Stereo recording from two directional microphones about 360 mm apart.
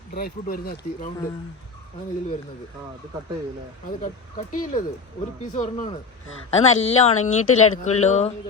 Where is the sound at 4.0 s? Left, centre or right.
Left.